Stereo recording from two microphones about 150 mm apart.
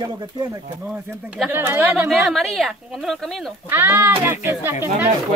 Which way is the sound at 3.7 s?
15° right (ahead or behind).